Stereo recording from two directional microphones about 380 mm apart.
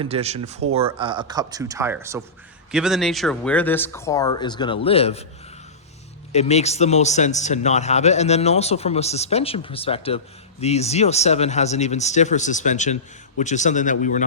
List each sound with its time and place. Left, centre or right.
0.0 s speech: centre
6.3 s speech: centre